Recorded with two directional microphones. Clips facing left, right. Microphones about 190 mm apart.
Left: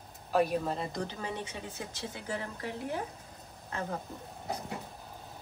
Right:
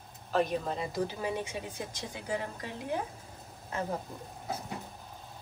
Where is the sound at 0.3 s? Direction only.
10° left (ahead or behind); by 3.0 s 15° right (ahead or behind).